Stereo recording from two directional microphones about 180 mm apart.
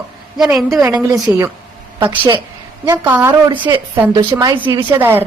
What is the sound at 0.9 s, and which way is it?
Speech, 20° right (ahead or behind).